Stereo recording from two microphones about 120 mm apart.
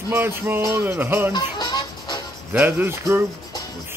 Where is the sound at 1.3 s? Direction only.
35° left (ahead or behind).